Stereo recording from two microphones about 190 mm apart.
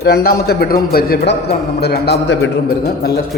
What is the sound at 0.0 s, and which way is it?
A man's voice, 55° left (ahead or behind).